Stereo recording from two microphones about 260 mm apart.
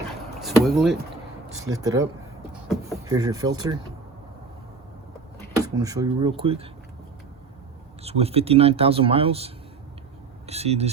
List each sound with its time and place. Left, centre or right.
0.3 s a sound: centre
1.6 s speech: centre
5.5 s speech: centre
8.0 s speech: right